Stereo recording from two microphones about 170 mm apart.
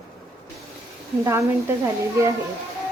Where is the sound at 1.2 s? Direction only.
15° right (ahead or behind).